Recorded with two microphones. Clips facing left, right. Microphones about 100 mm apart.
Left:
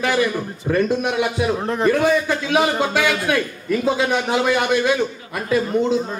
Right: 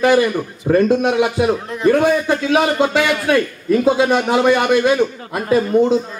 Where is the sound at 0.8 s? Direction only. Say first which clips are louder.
Right 5 dB; 50° right (ahead or behind).